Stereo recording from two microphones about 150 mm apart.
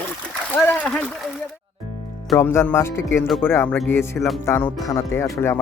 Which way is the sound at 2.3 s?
15° left (ahead or behind).